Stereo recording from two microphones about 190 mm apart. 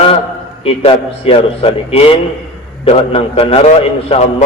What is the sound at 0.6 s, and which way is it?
A man's voice, 30° left (ahead or behind).